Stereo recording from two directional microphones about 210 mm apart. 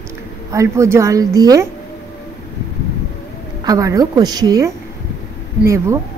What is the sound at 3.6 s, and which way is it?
A woman's voice, 15° right (ahead or behind).